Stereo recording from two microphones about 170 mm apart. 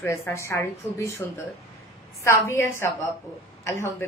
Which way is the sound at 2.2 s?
15° left (ahead or behind).